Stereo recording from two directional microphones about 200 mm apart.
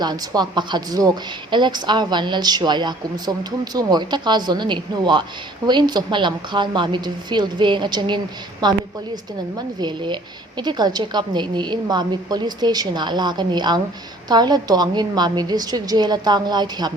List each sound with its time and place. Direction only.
0.0 s a woman's voice: 20° right (ahead or behind)